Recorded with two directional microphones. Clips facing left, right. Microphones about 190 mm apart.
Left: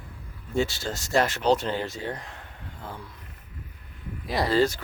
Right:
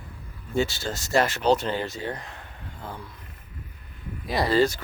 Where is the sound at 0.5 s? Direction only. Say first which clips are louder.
Right 1 dB; 5° right (ahead or behind).